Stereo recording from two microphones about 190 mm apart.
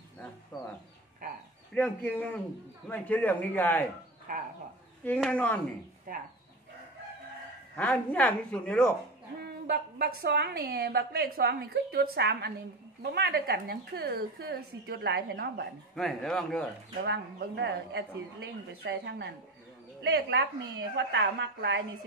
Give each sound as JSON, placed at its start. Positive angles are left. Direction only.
{"t": 1.7, "sound": "speech", "side_deg": 10}
{"t": 4.3, "sound": "speech", "side_deg": -45}
{"t": 5.0, "sound": "speech", "side_deg": 5}
{"t": 6.1, "sound": "speech", "side_deg": -45}
{"t": 7.7, "sound": "speech", "side_deg": 5}
{"t": 9.4, "sound": "a woman's voice", "side_deg": -55}
{"t": 15.9, "sound": "speech", "side_deg": 0}
{"t": 17.0, "sound": "a woman's voice", "side_deg": -60}
{"t": 20.9, "sound": "a woman's voice", "side_deg": -65}